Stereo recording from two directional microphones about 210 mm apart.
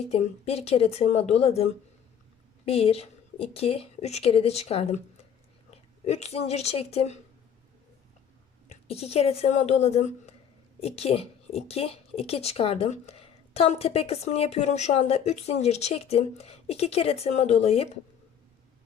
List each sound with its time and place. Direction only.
0.1 s a woman's voice: 30° left (ahead or behind)
2.6 s a woman's voice: 30° left (ahead or behind)
8.7 s a woman's voice: 30° left (ahead or behind)